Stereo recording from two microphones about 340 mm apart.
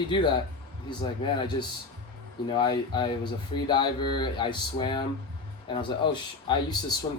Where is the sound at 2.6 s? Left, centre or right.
Centre.